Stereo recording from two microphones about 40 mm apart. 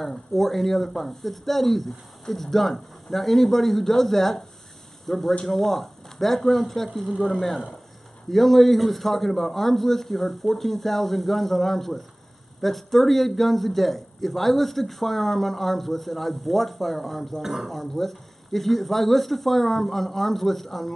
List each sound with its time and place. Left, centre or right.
0.0 s a man's voice: centre
17.7 s a man's voice: centre